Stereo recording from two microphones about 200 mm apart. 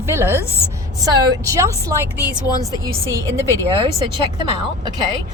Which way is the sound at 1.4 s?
15° right (ahead or behind).